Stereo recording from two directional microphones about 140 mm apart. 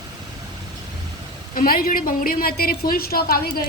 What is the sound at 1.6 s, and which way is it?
A woman's voice, 90° left.